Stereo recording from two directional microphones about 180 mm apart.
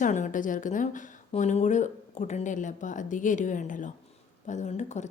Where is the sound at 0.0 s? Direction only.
45° left (ahead or behind).